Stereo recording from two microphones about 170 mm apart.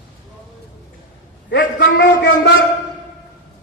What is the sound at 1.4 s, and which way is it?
A man's voice, 90° left.